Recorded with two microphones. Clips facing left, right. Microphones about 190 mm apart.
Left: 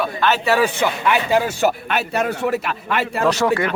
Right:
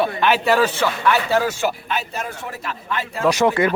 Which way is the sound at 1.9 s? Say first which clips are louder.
Left 6 dB; 70° left (ahead or behind).